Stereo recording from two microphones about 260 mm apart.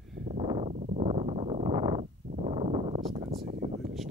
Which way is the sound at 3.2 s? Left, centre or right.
Right.